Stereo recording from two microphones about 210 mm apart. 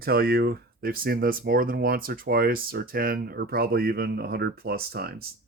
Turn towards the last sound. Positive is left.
turn(degrees=-45)  # may be behind; listen again after turning